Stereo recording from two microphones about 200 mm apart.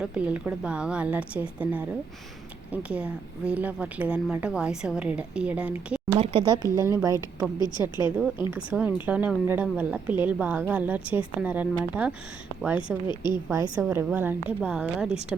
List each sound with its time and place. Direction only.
0.0 s a woman's voice: 5° right (ahead or behind)
6.1 s a woman's voice: 30° right (ahead or behind); by 13.0 s 5° right (ahead or behind)
13.1 s a woman's voice: 20° left (ahead or behind)
13.5 s a woman's voice: 15° right (ahead or behind)